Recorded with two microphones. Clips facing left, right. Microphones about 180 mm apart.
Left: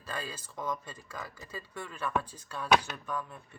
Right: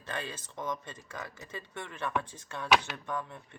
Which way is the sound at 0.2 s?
25° right (ahead or behind).